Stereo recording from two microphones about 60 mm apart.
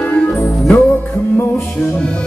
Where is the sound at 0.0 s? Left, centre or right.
Centre.